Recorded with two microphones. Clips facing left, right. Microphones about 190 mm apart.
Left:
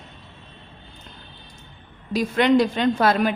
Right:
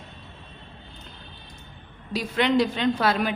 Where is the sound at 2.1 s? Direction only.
45° left (ahead or behind).